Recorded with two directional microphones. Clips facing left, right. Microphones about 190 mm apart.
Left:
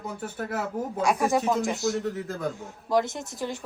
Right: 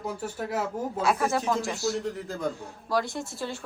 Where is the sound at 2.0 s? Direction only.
Centre (ahead or behind).